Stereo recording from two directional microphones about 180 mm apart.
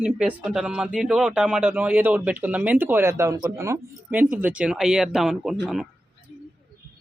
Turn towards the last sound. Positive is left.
turn(degrees=0)  # may be behind; listen again after turning